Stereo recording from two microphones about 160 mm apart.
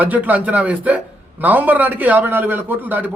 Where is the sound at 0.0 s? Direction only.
10° right (ahead or behind).